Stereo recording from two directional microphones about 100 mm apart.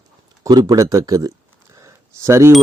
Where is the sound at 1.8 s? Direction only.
30° right (ahead or behind).